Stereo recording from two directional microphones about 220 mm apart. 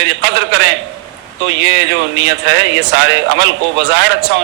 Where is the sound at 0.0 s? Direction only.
50° right (ahead or behind).